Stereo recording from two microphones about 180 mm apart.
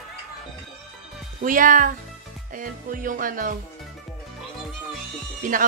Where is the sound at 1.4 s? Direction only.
50° right (ahead or behind).